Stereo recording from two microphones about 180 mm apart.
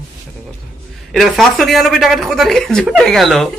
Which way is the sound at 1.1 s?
Centre (ahead or behind).